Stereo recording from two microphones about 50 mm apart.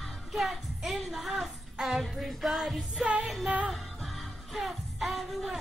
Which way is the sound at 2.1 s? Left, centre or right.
Centre.